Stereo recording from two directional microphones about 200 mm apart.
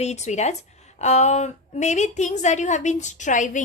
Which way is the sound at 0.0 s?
35° left (ahead or behind).